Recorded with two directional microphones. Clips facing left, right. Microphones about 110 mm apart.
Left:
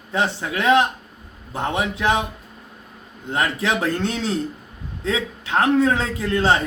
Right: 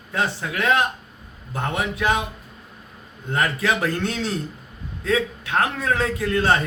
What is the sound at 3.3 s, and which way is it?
A man's voice, 25° left (ahead or behind).